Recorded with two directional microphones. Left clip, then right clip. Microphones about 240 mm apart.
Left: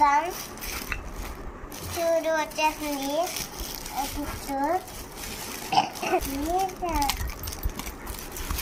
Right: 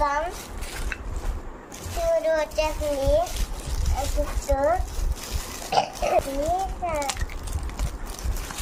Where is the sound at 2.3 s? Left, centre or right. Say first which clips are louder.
Right 1 dB; centre.